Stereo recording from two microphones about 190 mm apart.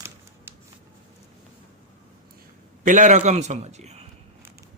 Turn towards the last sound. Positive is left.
turn(degrees=-35)  # may be behind; listen again after turning